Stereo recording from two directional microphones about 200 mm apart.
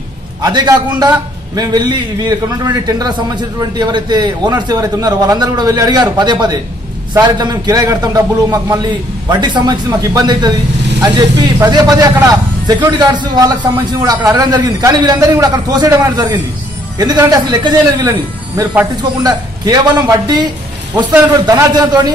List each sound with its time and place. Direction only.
0.4 s a man's voice: 20° right (ahead or behind)
21.5 s a man's voice: 20° right (ahead or behind)